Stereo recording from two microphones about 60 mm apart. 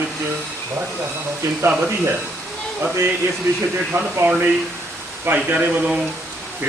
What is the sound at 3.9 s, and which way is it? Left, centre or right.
Speech, right.